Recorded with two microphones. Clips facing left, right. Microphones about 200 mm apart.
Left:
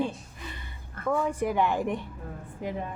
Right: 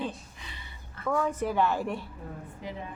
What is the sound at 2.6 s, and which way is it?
Speech, 50° left (ahead or behind).